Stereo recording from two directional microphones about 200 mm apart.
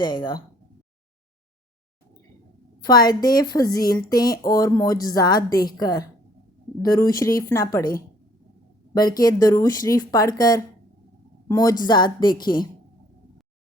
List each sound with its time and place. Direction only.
0.0 s speech: 20° left (ahead or behind)
2.8 s speech: 20° left (ahead or behind)